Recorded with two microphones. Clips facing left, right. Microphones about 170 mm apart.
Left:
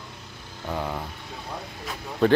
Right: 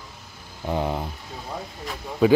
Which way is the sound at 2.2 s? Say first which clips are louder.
Right 2 dB; 5° right (ahead or behind).